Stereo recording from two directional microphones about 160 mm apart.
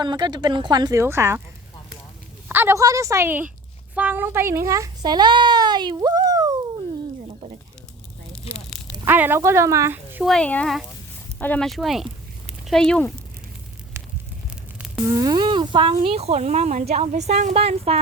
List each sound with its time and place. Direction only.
0.0 s speech: 25° right (ahead or behind)
2.5 s a child's voice: 15° right (ahead or behind)
8.3 s a sound: 5° left (ahead or behind)
9.0 s speech: 10° right (ahead or behind)
10.2 s speech: 5° left (ahead or behind)
14.0 s a sound: 15° right (ahead or behind)
15.0 s a woman's voice: 20° right (ahead or behind); by 18.0 s 40° right (ahead or behind)